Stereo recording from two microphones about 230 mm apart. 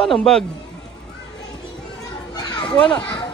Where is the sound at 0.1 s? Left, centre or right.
Centre.